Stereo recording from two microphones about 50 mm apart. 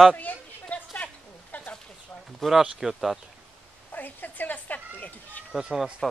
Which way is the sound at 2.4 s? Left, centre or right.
Centre.